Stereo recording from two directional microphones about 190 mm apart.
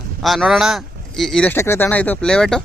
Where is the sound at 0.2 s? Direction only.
Centre (ahead or behind).